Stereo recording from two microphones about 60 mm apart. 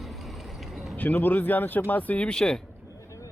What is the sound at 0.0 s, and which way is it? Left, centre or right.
Vehicle, centre.